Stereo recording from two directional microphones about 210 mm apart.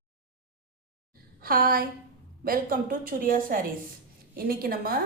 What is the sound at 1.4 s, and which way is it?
A woman's voice, 45° right (ahead or behind).